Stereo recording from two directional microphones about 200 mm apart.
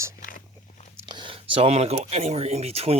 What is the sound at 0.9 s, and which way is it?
Speech, 20° right (ahead or behind).